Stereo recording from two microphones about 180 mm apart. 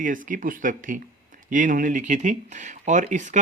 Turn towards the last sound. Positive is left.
turn(degrees=-45)  # may be behind; listen again after turning